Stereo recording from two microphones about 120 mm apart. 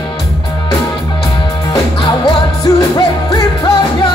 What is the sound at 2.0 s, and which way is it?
Music, 45° left (ahead or behind).